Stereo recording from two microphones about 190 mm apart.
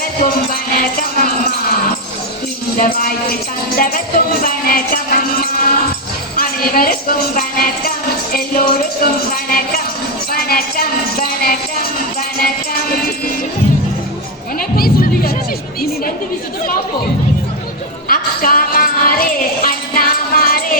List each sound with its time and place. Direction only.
0.0 s a sound: 50° left (ahead or behind)
2.7 s a woman's voice: 50° left (ahead or behind)
18.1 s music: 50° left (ahead or behind)